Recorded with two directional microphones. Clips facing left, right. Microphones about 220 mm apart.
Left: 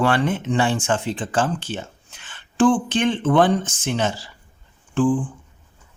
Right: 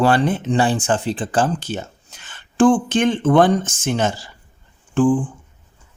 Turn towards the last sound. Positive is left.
turn(degrees=-50)  # may be behind; listen again after turning